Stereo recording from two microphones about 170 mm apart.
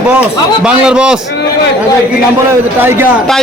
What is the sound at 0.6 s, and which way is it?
Speech, 5° right (ahead or behind).